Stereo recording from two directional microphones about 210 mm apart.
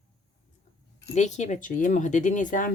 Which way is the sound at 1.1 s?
35° left (ahead or behind).